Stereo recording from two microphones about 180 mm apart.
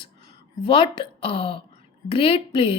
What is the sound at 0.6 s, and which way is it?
Speech, 30° left (ahead or behind).